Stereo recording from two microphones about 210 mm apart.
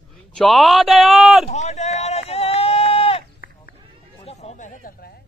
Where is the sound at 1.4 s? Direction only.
30° left (ahead or behind).